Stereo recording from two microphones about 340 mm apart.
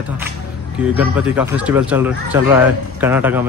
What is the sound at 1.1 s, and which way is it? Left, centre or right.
Speech, centre.